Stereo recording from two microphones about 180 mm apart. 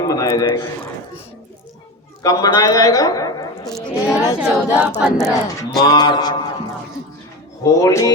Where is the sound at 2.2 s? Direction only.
20° left (ahead or behind).